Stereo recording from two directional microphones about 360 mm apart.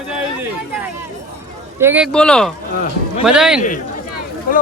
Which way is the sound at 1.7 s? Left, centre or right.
Centre.